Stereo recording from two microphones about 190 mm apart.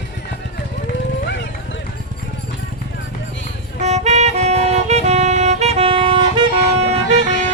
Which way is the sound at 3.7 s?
35° right (ahead or behind).